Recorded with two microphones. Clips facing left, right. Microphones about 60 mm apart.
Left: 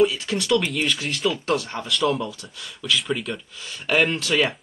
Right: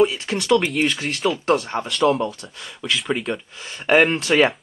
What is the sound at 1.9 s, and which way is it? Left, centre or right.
Speech, centre.